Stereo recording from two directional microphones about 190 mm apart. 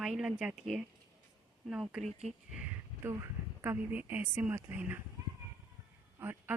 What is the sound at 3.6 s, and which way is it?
A woman's voice, 10° right (ahead or behind).